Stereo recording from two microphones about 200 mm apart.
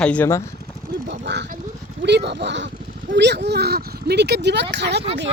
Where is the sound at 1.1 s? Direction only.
60° right (ahead or behind).